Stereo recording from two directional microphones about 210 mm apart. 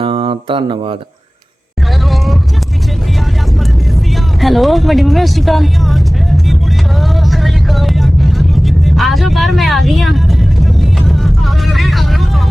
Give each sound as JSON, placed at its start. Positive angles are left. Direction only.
{"t": 0.0, "sound": "a sound", "side_deg": -25}
{"t": 2.0, "sound": "vehicle", "side_deg": 0}
{"t": 4.4, "sound": "speech", "side_deg": 0}
{"t": 7.0, "sound": "vehicle", "side_deg": 0}